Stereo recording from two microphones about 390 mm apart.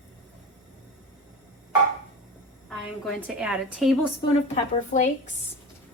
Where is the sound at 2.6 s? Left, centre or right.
Centre.